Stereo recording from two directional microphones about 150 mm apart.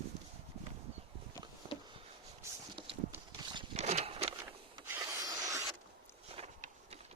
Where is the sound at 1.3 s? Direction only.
25° left (ahead or behind).